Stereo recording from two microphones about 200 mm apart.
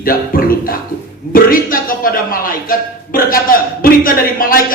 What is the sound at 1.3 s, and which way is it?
A man's voice, 45° left (ahead or behind).